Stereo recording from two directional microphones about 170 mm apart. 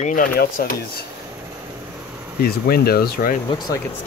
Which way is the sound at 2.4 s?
65° left (ahead or behind).